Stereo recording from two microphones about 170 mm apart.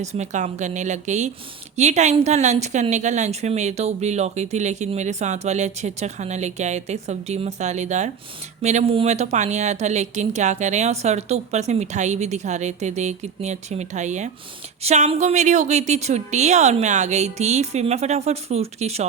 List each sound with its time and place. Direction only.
0.0 s a woman's voice: 40° right (ahead or behind)